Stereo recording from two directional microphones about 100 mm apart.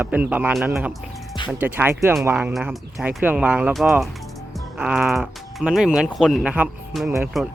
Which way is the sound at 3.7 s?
Centre (ahead or behind).